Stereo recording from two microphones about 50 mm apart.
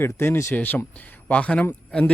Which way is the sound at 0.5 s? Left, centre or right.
Left.